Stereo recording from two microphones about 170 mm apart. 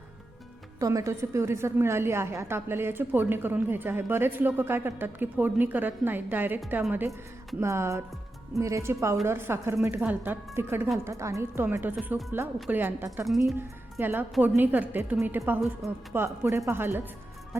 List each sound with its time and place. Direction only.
0.8 s a woman's voice: 20° right (ahead or behind)
13.2 s speech: centre (ahead or behind)
14.0 s a woman's voice: 10° right (ahead or behind)